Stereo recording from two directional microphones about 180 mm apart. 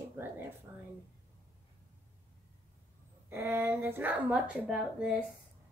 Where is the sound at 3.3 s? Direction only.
15° right (ahead or behind).